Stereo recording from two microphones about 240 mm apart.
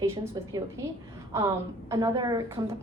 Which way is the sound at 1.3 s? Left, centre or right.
Centre.